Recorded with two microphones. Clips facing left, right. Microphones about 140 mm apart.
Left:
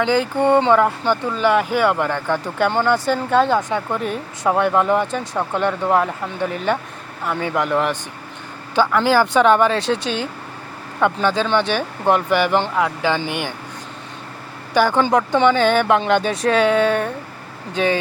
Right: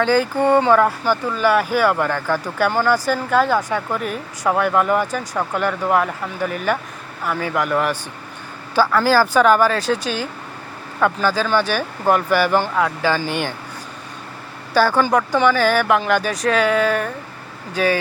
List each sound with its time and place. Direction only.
0.0 s speech: 20° left (ahead or behind)
14.7 s speech: 15° left (ahead or behind)